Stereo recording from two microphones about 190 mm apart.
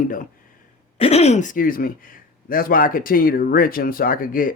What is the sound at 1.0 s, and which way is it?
Speech, 35° left (ahead or behind).